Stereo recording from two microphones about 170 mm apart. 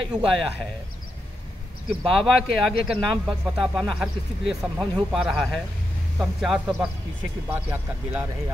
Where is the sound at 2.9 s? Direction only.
30° right (ahead or behind).